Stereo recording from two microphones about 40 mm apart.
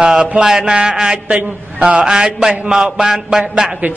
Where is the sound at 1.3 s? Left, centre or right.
Right.